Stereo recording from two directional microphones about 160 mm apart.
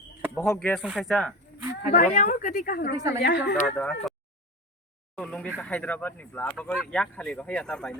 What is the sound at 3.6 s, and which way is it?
Speech, 5° left (ahead or behind).